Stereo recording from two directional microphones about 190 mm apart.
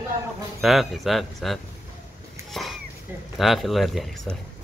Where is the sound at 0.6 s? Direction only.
Centre (ahead or behind).